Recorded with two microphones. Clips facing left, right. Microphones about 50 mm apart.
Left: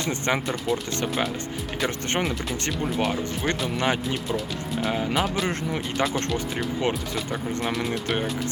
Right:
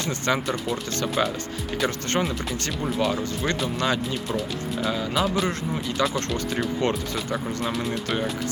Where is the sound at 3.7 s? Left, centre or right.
Left.